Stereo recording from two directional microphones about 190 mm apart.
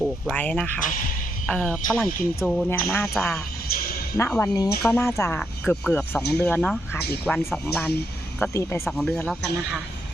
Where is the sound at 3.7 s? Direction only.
50° left (ahead or behind).